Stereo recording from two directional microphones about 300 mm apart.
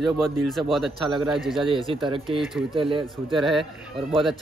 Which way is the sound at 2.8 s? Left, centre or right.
Centre.